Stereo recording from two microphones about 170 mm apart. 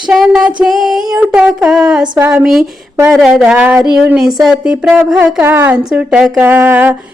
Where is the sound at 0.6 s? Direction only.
Centre (ahead or behind).